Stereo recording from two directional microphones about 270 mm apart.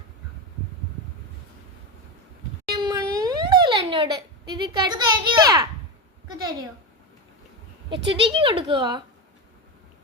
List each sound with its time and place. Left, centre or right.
2.7 s a sound: centre
6.2 s a woman's voice: centre
8.0 s a woman's voice: centre